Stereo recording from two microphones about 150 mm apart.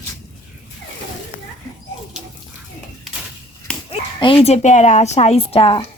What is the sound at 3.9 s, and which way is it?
Speech, 35° left (ahead or behind).